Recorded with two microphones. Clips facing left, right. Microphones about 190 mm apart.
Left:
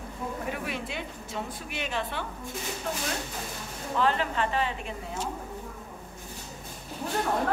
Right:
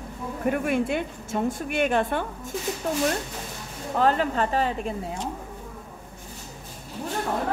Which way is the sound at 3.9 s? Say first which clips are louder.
Right 4 dB; 45° right (ahead or behind).